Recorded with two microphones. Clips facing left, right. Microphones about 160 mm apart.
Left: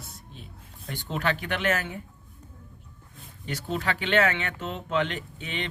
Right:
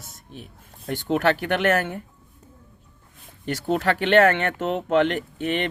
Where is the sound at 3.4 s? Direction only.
60° right (ahead or behind).